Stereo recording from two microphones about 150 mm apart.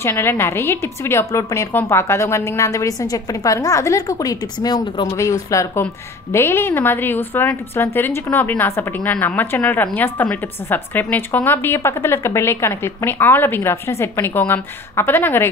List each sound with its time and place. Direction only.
0.0 s a woman's voice: 15° left (ahead or behind)